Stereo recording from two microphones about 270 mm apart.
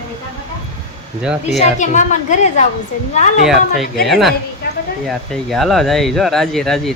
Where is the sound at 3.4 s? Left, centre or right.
Centre.